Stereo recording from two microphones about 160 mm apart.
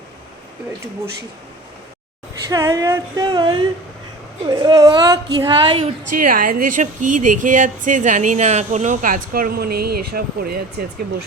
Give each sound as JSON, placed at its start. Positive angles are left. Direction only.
{"t": 2.5, "sound": "a woman's voice", "side_deg": -20}
{"t": 6.1, "sound": "speech", "side_deg": -60}